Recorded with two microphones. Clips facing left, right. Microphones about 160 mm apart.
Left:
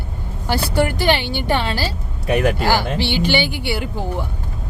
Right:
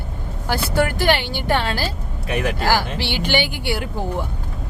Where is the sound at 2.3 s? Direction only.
50° left (ahead or behind).